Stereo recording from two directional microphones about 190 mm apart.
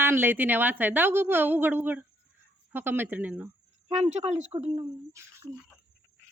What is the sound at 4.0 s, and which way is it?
Speech, 35° right (ahead or behind).